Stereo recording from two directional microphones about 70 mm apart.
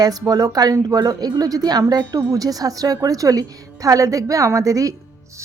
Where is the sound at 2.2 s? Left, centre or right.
Right.